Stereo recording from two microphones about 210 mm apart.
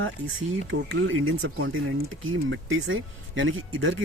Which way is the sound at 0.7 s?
60° right (ahead or behind).